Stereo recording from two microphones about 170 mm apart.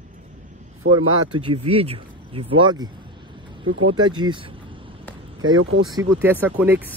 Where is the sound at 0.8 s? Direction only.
50° right (ahead or behind).